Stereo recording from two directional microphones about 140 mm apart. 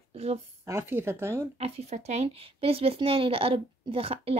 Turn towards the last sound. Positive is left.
turn(degrees=-45)  # may be behind; listen again after turning